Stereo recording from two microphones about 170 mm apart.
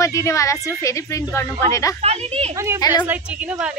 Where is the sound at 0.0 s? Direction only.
20° left (ahead or behind).